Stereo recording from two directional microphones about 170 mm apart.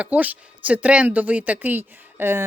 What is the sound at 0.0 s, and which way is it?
Speech, 10° right (ahead or behind).